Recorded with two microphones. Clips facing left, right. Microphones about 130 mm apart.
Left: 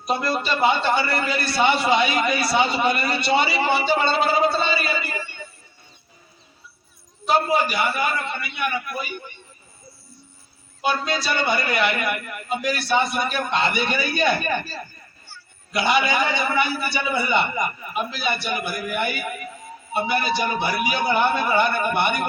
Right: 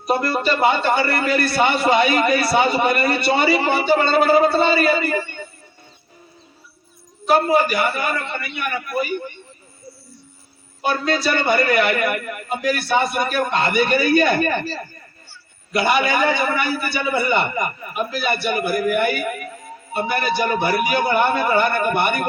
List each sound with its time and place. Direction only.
0.1 s a man's voice: 50° right (ahead or behind)
7.3 s a man's voice: 50° right (ahead or behind)
10.8 s a man's voice: 55° right (ahead or behind)
15.8 s a man's voice: 50° right (ahead or behind)